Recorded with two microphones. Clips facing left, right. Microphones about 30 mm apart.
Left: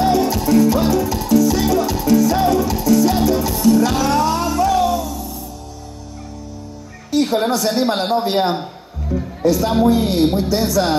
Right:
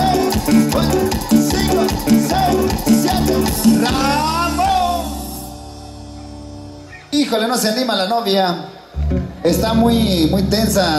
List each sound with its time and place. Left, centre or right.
0.0 s music: right
7.1 s a woman's voice: right
9.1 s music: right
9.8 s a woman's voice: right